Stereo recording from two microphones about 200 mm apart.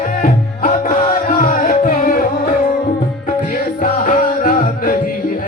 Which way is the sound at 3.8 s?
40° left (ahead or behind).